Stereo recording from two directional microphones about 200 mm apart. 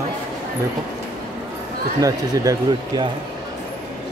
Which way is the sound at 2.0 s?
15° right (ahead or behind).